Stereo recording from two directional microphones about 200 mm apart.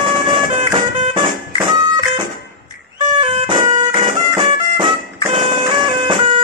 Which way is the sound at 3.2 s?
30° right (ahead or behind).